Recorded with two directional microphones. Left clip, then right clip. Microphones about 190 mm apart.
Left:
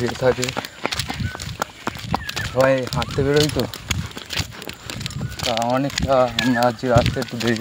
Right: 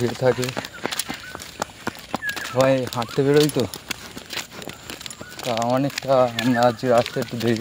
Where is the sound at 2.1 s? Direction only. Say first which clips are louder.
Left 1 dB; 40° left (ahead or behind).